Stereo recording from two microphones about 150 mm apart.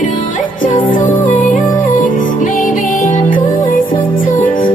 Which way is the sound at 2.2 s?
60° left (ahead or behind).